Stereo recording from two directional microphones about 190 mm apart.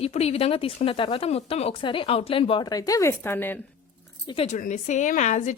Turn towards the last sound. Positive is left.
turn(degrees=40)  # may be behind; listen again after turning